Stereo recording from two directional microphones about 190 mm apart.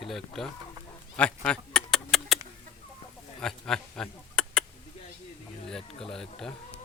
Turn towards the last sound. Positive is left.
turn(degrees=5)  # may be behind; listen again after turning